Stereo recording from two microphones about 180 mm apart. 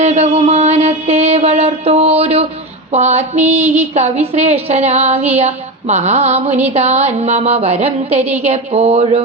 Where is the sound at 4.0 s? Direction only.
40° right (ahead or behind).